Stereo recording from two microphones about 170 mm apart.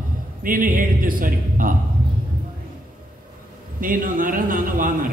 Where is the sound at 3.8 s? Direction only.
55° right (ahead or behind).